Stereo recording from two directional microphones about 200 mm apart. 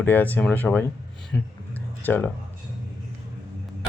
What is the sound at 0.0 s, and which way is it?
Speech, 10° left (ahead or behind).